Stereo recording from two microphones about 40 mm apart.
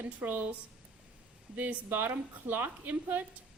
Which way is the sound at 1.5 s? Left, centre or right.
Right.